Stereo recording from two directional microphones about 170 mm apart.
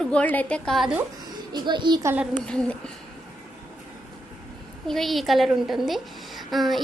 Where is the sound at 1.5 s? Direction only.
25° right (ahead or behind).